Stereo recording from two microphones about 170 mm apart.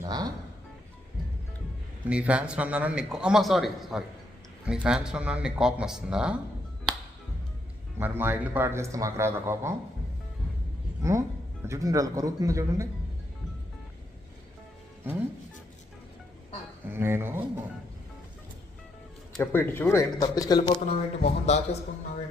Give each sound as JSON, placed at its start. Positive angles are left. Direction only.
{"t": 0.0, "sound": "speech", "side_deg": -25}
{"t": 2.0, "sound": "a man's voice", "side_deg": -5}
{"t": 7.9, "sound": "a man's voice", "side_deg": -15}
{"t": 11.0, "sound": "a man's voice", "side_deg": -15}
{"t": 15.1, "sound": "a man's voice", "side_deg": -10}
{"t": 16.9, "sound": "a man's voice", "side_deg": -15}
{"t": 19.4, "sound": "speech", "side_deg": 15}
{"t": 20.8, "sound": "speech", "side_deg": 40}